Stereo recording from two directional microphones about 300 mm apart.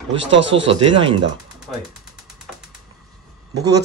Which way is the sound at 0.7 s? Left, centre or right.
Centre.